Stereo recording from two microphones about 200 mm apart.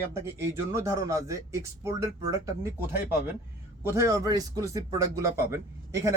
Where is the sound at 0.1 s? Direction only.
15° right (ahead or behind).